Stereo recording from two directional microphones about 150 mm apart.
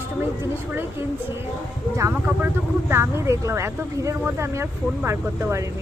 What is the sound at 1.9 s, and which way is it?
Speech, 15° right (ahead or behind).